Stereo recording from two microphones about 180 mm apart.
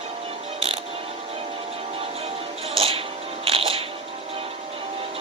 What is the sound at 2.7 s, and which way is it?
Music, 30° right (ahead or behind).